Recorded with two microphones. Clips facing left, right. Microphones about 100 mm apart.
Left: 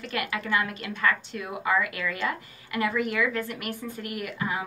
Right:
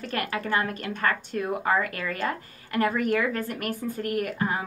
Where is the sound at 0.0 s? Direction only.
40° right (ahead or behind).